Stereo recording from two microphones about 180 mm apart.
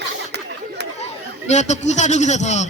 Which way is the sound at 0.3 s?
70° right (ahead or behind).